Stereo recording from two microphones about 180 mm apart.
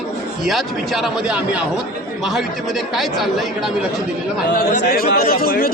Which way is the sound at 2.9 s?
Centre (ahead or behind).